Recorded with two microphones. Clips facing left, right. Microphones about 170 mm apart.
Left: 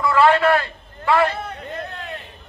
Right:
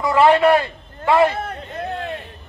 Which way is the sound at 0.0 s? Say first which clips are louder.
Right 2 dB; 20° right (ahead or behind).